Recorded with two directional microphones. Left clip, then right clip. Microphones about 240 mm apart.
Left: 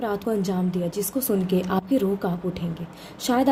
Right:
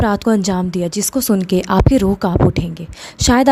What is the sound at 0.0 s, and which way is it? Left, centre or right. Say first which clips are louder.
A woman's voice: right 9 dB; right.